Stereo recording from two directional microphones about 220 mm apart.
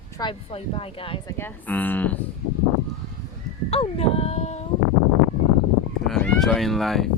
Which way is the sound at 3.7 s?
25° left (ahead or behind).